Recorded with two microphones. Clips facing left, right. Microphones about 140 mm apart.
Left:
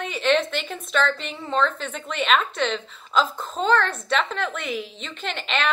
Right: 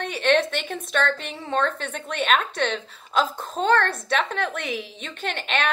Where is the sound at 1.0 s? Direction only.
50° right (ahead or behind).